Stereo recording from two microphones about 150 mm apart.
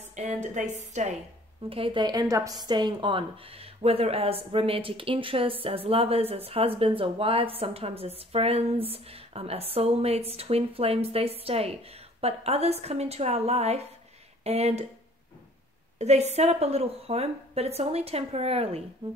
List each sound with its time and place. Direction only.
0.1 s a woman's voice: 50° right (ahead or behind)
1.7 s a woman's voice: 35° right (ahead or behind)
16.0 s a woman's voice: 45° right (ahead or behind)